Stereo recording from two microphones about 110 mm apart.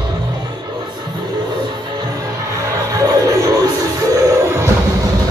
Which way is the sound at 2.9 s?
30° right (ahead or behind).